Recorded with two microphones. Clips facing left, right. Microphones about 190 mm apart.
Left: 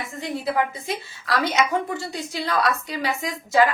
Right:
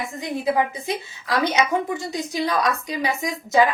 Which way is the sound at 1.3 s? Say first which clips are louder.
Right 1 dB; 15° right (ahead or behind).